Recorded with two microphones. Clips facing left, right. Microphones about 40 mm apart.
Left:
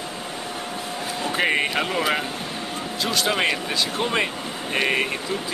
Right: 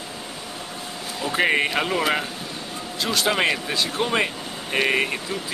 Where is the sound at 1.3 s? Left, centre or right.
Centre.